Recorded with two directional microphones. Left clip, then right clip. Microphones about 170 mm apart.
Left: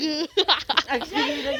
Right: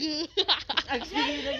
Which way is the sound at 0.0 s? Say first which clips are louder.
Left 5 dB; 40° left (ahead or behind).